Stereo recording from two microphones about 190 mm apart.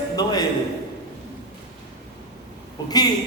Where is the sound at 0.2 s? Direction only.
20° left (ahead or behind).